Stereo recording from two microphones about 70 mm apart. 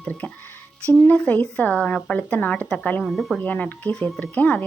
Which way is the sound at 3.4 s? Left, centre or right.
Left.